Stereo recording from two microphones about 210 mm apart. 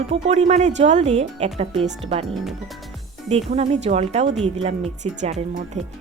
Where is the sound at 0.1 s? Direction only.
30° right (ahead or behind).